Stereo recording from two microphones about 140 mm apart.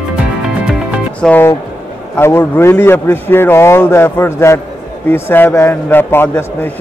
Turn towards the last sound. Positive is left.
turn(degrees=15)  # may be behind; listen again after turning